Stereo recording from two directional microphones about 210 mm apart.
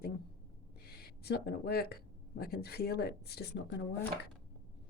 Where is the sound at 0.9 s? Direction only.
50° left (ahead or behind).